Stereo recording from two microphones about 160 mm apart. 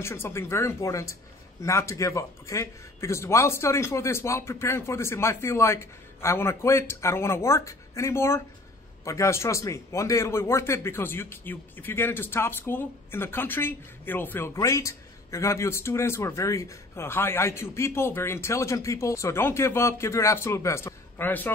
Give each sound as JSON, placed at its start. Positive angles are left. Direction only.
{"t": 0.0, "sound": "speech", "side_deg": 15}